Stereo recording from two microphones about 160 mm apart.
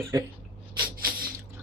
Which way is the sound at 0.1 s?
20° right (ahead or behind).